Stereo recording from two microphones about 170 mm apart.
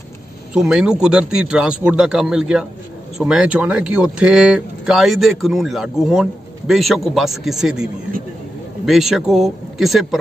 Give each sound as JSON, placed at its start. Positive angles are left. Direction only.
{"t": 0.6, "sound": "speech", "side_deg": -5}
{"t": 8.8, "sound": "speech", "side_deg": 0}